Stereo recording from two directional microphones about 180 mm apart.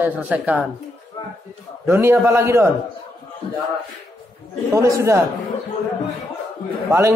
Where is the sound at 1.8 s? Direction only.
15° right (ahead or behind).